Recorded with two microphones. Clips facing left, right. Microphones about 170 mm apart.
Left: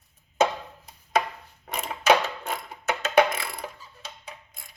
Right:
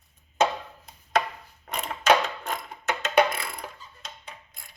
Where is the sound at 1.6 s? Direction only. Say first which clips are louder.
Left 1 dB; 5° left (ahead or behind).